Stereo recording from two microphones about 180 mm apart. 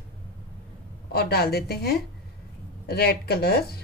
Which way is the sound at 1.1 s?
60° left (ahead or behind).